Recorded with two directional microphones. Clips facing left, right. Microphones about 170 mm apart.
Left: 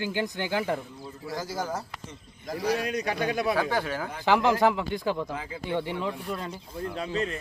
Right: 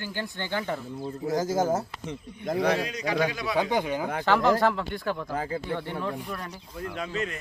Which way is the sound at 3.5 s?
20° right (ahead or behind).